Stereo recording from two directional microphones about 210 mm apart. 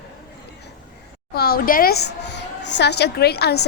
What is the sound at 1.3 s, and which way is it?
A woman's voice, 45° left (ahead or behind).